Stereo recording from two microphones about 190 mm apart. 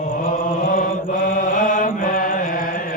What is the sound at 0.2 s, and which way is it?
Mantra, 45° left (ahead or behind).